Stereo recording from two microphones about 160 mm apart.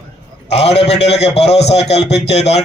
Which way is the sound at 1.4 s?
90° left.